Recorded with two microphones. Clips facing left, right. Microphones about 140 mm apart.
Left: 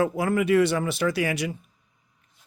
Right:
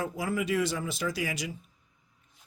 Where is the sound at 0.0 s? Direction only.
60° left (ahead or behind).